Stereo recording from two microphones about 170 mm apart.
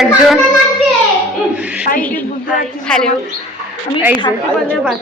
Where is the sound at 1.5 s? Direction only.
5° right (ahead or behind).